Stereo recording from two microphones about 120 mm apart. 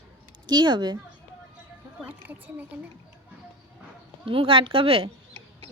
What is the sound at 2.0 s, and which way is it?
Speech, 15° right (ahead or behind).